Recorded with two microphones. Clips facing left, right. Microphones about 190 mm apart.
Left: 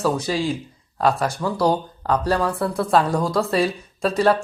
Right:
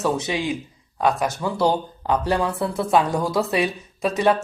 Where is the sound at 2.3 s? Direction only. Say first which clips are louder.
Left 1 dB; 20° right (ahead or behind).